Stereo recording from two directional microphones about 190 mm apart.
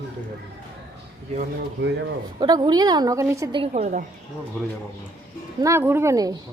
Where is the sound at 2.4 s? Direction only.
20° right (ahead or behind).